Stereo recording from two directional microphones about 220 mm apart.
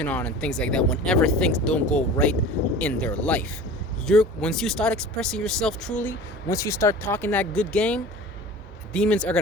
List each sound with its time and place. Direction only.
0.0 s speech: 5° left (ahead or behind)